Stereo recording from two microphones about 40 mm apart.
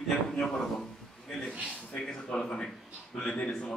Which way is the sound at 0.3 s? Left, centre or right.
Centre.